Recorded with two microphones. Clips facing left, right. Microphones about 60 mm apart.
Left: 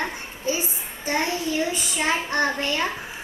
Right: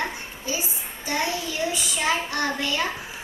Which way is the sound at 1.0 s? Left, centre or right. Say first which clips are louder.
Left 2 dB; left.